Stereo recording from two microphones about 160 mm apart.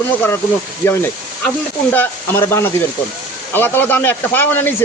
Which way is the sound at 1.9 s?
15° left (ahead or behind).